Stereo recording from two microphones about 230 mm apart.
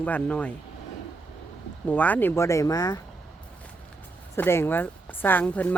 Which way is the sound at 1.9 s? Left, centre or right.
Centre.